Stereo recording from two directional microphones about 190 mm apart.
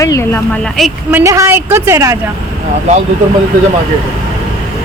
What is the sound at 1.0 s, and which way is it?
A woman's voice, 15° right (ahead or behind).